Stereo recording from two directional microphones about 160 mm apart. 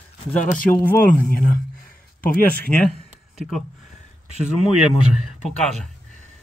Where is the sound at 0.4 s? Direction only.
55° left (ahead or behind).